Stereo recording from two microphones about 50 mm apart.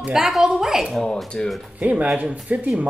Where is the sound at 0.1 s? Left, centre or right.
Centre.